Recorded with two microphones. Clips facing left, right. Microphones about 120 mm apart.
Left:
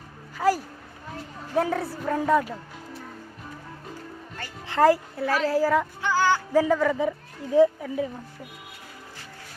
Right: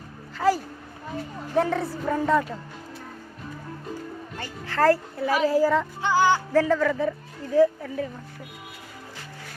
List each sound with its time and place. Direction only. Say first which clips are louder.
0.3 s a sound: right 1 dB; 5° left (ahead or behind)
1.5 s a woman's voice: right 1 dB; 5° left (ahead or behind)
4.6 s speech: left 1 dB; 15° left (ahead or behind)
5.1 s a woman's voice: right 2 dB; centre (ahead or behind)
6.0 s music: right 2 dB; 20° right (ahead or behind)
6.5 s speech: even; 10° left (ahead or behind)